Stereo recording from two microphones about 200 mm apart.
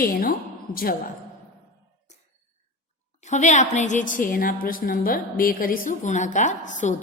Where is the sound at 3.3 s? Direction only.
35° left (ahead or behind).